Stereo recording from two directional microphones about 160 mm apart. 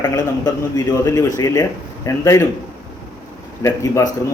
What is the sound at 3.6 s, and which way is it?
Speech, 20° left (ahead or behind).